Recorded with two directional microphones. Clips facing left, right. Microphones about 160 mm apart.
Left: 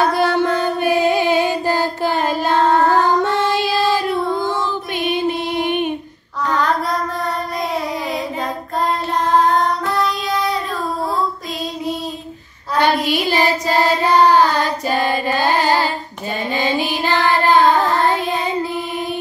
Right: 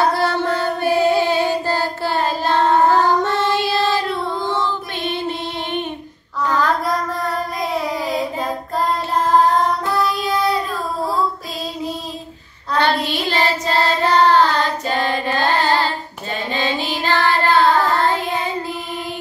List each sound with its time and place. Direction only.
0.0 s female singing: 15° left (ahead or behind)
12.7 s child singing: 10° left (ahead or behind)